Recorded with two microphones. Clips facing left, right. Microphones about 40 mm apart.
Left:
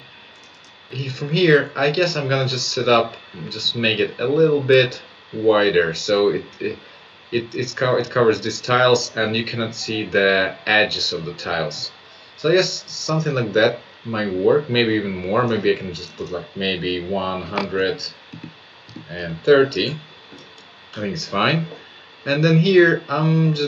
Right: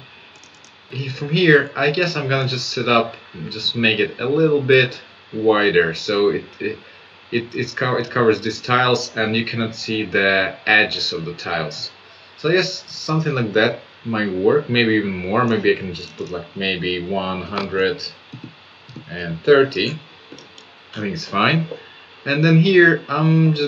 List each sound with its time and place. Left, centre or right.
0.9 s speech: centre
21.1 s speech: centre